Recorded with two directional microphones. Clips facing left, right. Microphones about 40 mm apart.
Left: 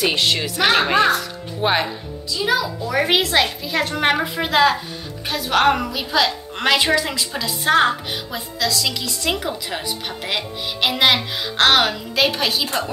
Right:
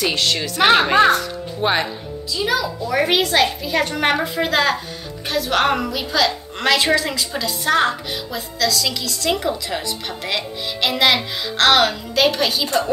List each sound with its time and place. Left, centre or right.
0.0 s a woman's voice: centre
0.7 s a child's voice: centre
6.1 s a woman's voice: centre